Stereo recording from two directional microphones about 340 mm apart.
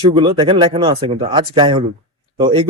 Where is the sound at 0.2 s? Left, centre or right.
Centre.